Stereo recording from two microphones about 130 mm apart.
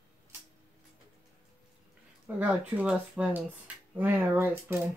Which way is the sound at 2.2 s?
10° right (ahead or behind).